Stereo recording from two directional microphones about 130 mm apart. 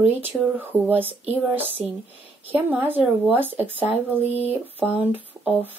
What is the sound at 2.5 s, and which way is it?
Speech, 15° right (ahead or behind).